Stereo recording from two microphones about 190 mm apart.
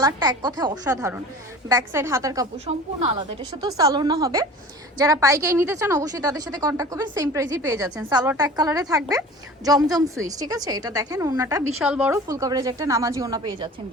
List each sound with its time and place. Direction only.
0.0 s a woman's voice: 20° right (ahead or behind)
2.6 s speech: 30° right (ahead or behind)
3.5 s a woman's voice: 20° right (ahead or behind)
11.8 s a woman's voice: 5° right (ahead or behind); by 13.7 s 20° right (ahead or behind)